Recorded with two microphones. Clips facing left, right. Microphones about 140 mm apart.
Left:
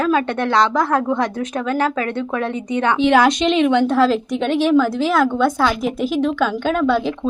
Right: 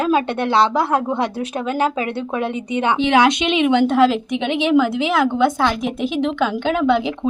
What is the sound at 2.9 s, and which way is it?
Speech, centre (ahead or behind).